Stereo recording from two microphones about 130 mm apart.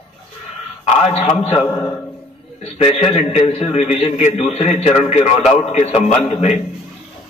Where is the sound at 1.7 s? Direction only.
25° left (ahead or behind).